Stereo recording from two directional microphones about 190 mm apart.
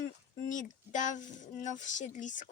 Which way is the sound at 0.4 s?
40° left (ahead or behind).